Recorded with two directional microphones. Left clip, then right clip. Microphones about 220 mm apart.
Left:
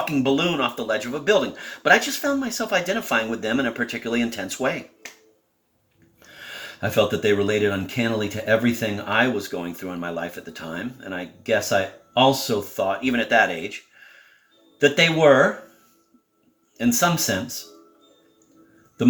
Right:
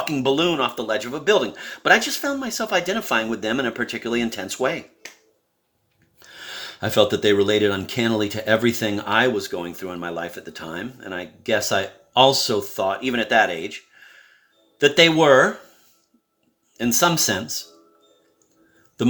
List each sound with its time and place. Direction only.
0.0 s speech: 50° right (ahead or behind)
6.2 s speech: 55° right (ahead or behind)
16.7 s speech: 55° right (ahead or behind)